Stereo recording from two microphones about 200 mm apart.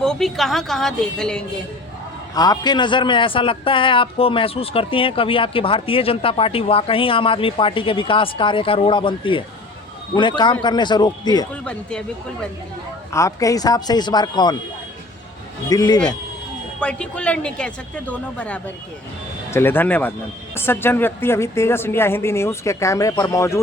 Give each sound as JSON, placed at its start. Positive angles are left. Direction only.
{"t": 0.0, "sound": "a man's voice", "side_deg": 0}
{"t": 2.3, "sound": "a man's voice", "side_deg": 20}
{"t": 11.6, "sound": "a man's voice", "side_deg": 5}
{"t": 13.1, "sound": "a man's voice", "side_deg": 15}
{"t": 15.7, "sound": "a man's voice", "side_deg": 20}
{"t": 16.8, "sound": "a man's voice", "side_deg": 5}